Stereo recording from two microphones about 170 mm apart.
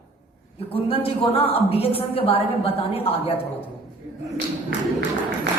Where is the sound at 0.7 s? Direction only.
35° left (ahead or behind).